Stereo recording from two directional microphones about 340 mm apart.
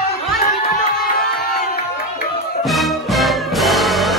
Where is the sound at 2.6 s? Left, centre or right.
Centre.